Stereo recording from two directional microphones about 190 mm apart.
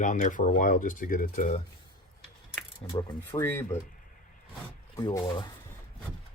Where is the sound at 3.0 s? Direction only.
15° left (ahead or behind).